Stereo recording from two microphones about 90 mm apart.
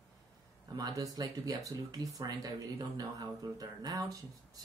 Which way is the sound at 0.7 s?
45° right (ahead or behind).